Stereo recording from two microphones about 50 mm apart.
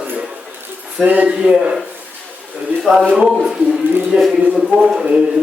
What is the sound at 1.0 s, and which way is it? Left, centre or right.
Speech, right.